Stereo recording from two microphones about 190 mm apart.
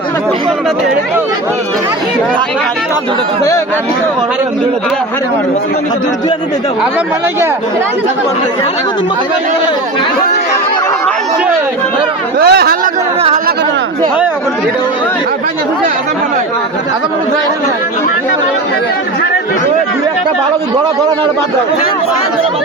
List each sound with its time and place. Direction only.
12.4 s speech: 55° right (ahead or behind)